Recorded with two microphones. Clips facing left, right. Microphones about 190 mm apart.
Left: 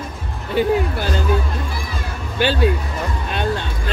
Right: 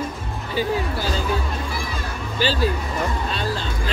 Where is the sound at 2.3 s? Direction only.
60° left (ahead or behind).